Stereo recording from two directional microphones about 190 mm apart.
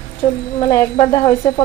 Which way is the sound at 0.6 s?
20° left (ahead or behind).